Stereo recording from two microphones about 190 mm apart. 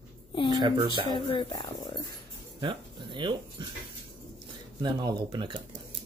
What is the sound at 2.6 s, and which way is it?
Speech, 25° right (ahead or behind).